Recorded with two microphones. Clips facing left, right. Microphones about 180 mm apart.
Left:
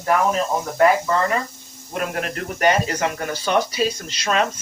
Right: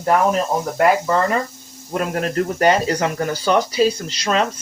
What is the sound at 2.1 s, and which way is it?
Speech, 35° right (ahead or behind).